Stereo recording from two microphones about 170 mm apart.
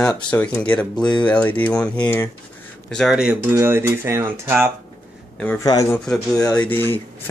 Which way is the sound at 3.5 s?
15° right (ahead or behind).